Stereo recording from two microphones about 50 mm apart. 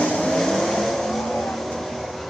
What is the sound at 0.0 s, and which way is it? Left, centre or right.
Vehicle, centre.